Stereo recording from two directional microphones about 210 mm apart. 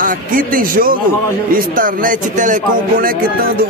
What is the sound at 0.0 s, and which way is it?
Speech, 40° right (ahead or behind).